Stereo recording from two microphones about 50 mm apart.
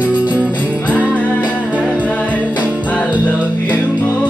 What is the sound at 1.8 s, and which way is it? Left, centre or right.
Music, left.